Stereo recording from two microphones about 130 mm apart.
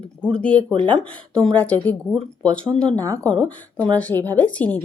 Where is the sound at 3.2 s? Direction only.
10° left (ahead or behind).